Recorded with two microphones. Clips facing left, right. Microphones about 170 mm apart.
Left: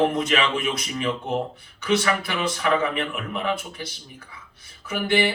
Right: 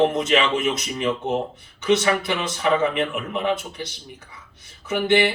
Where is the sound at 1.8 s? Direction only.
20° right (ahead or behind).